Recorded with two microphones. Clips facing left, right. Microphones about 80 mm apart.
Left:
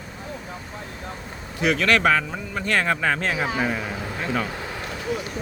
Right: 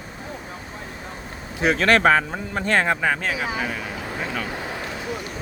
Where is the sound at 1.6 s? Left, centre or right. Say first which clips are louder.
Right 2 dB; right.